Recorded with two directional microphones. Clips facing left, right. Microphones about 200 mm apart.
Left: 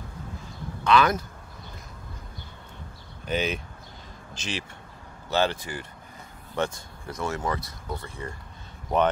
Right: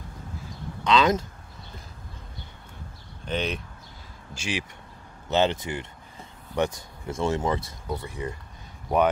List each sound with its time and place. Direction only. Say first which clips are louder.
0.8 s speech: even; 20° right (ahead or behind)
3.3 s speech: left 1 dB; 5° left (ahead or behind)
4.3 s speech: right 3 dB; 10° right (ahead or behind)
5.3 s speech: right 2 dB; 20° right (ahead or behind)